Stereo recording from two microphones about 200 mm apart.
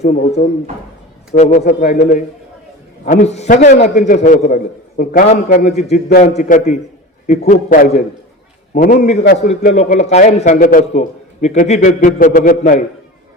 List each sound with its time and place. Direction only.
0.0 s a man's voice: 40° left (ahead or behind)